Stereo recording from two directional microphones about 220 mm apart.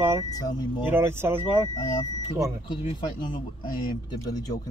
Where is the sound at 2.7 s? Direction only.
20° left (ahead or behind).